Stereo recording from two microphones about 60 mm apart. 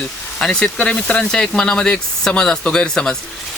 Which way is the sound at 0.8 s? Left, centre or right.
Left.